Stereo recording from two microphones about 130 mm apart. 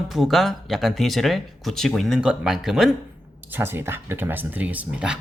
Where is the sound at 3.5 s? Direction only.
20° right (ahead or behind).